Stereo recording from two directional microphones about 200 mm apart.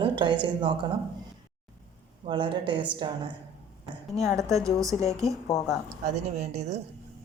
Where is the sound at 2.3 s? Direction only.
25° right (ahead or behind).